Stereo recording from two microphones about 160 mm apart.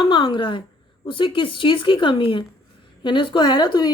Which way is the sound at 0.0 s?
30° left (ahead or behind).